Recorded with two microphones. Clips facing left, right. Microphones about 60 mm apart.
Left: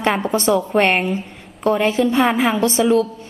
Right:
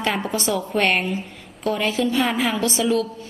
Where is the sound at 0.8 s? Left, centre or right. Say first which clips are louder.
Left 4 dB; left.